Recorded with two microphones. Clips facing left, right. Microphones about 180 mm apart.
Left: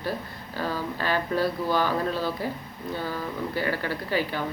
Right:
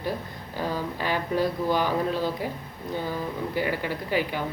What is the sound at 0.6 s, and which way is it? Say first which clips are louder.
Speech: even; 15° right (ahead or behind).